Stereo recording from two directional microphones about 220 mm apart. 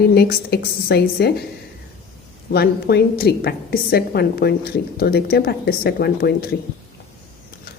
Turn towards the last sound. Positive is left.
turn(degrees=45)  # may be behind; listen again after turning